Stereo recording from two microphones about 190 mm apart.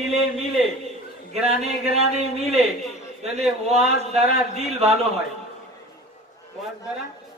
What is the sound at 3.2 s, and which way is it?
A man's voice, 35° right (ahead or behind).